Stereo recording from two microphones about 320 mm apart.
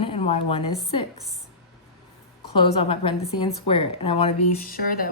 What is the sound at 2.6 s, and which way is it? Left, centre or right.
A woman's voice, centre.